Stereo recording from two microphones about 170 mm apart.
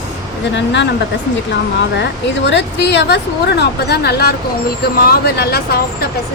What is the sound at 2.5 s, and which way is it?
A woman's voice, 90° left.